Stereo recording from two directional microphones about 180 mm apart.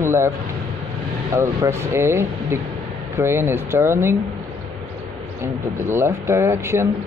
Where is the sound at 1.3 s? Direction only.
15° right (ahead or behind).